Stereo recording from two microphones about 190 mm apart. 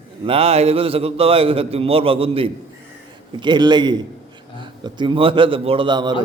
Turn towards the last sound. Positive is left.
turn(degrees=-25)  # may be behind; listen again after turning